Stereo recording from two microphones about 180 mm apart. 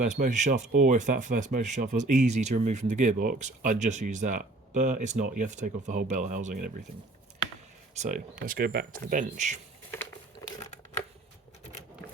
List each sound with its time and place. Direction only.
0.0 s speech: 45° right (ahead or behind)
7.9 s speech: 45° right (ahead or behind)